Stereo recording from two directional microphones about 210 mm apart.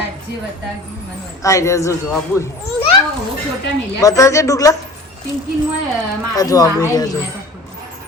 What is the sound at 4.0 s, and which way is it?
Speech, 15° left (ahead or behind).